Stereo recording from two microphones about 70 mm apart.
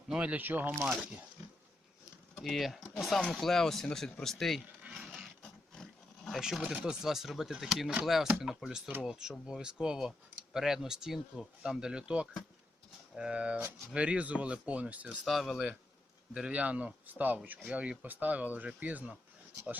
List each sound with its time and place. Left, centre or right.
0.1 s speech: centre
2.3 s speech: centre
4.9 s a sound: centre
5.4 s roaring cats: centre
6.8 s speech: centre
15.2 s speech: centre
16.3 s speech: centre